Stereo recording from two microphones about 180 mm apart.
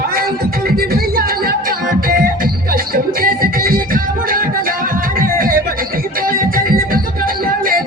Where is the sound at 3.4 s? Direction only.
50° right (ahead or behind).